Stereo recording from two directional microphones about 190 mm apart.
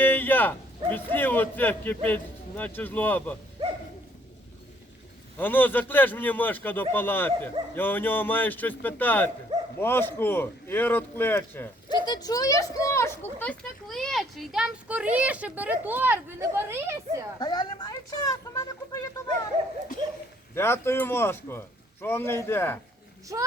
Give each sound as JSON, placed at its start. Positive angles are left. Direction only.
{"t": 0.0, "sound": "a man's voice", "side_deg": 10}
{"t": 5.4, "sound": "speech", "side_deg": 10}
{"t": 9.5, "sound": "dog", "side_deg": -35}
{"t": 9.8, "sound": "speech", "side_deg": 10}
{"t": 11.9, "sound": "speech", "side_deg": 20}
{"t": 17.4, "sound": "speech", "side_deg": 20}
{"t": 20.6, "sound": "speech", "side_deg": 10}